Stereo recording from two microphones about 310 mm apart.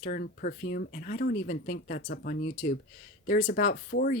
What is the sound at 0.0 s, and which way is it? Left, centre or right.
Speech, left.